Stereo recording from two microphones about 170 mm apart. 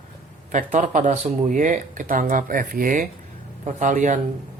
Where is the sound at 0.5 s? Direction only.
50° right (ahead or behind).